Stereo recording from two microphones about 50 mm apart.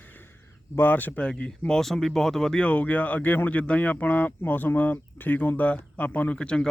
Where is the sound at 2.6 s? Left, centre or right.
Left.